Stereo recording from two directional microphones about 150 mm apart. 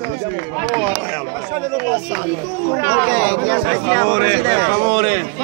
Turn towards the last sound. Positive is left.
turn(degrees=-55)  # may be behind; listen again after turning